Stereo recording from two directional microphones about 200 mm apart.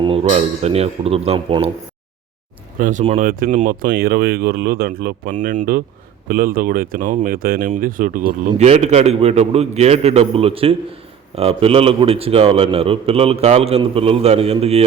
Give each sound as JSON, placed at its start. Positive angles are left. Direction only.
{"t": 0.0, "sound": "a man's voice", "side_deg": -30}
{"t": 2.7, "sound": "speech", "side_deg": -40}
{"t": 3.0, "sound": "a man's voice", "side_deg": -30}
{"t": 3.2, "sound": "a man's voice", "side_deg": -40}